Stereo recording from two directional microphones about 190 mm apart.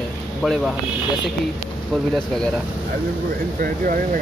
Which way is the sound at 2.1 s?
5° left (ahead or behind).